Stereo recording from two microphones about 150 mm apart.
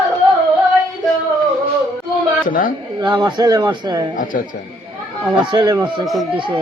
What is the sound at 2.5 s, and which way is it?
Speech, 70° left (ahead or behind).